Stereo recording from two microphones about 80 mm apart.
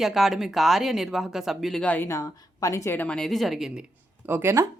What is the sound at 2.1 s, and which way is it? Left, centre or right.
Speech, left.